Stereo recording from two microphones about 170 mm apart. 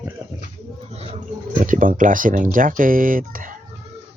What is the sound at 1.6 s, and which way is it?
Speech, 50° right (ahead or behind).